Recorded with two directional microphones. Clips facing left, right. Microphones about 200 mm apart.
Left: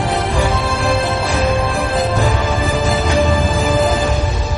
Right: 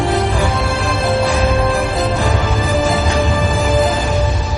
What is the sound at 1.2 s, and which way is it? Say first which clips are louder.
Music: right 2 dB; centre (ahead or behind).